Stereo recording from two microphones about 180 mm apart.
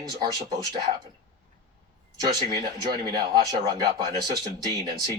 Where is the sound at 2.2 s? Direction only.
20° right (ahead or behind).